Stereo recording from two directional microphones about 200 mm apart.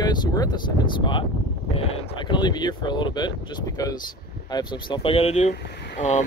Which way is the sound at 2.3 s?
20° left (ahead or behind).